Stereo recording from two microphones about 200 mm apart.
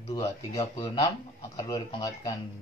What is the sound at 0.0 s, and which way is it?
Speech, 20° left (ahead or behind).